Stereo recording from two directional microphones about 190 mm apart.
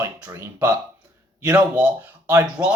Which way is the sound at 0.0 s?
15° right (ahead or behind).